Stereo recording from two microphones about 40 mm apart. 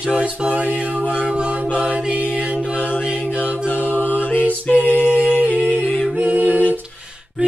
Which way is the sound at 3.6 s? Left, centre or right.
Left.